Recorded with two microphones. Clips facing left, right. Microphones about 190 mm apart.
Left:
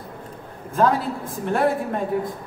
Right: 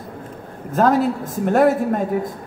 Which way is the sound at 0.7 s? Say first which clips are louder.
Right 4 dB; 45° right (ahead or behind).